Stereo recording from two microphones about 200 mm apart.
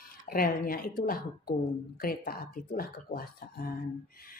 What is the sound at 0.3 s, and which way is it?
Speech, 45° left (ahead or behind).